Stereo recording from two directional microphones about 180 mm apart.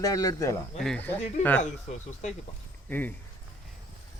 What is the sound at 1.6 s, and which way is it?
Speech, 40° left (ahead or behind).